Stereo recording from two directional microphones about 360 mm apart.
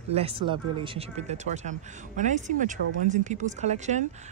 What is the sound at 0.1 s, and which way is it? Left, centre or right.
Speech, centre.